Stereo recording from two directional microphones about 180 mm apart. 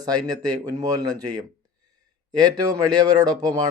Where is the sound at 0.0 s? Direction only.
20° right (ahead or behind).